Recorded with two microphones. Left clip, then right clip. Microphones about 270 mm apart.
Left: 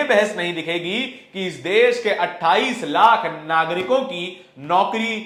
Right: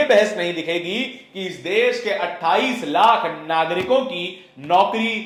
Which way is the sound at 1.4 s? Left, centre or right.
Left.